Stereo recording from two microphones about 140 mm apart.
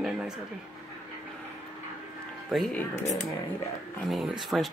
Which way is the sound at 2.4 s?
Centre (ahead or behind).